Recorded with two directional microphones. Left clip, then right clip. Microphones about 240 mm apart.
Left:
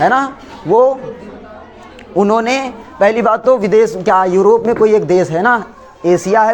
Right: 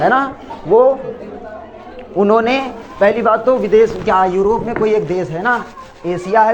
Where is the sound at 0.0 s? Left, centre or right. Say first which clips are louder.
Left 1 dB; left.